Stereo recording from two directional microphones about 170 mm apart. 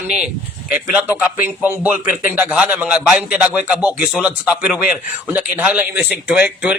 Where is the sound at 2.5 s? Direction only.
5° right (ahead or behind).